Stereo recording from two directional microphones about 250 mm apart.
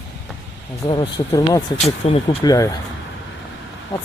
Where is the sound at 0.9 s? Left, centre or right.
Centre.